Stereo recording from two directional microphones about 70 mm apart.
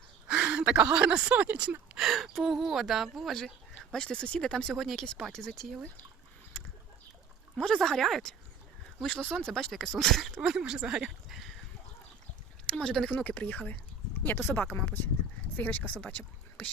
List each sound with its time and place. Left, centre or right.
0.3 s speech: centre
2.0 s speech: centre
7.5 s speech: centre
12.6 s speech: centre; by 14.5 s left
14.5 s speech: left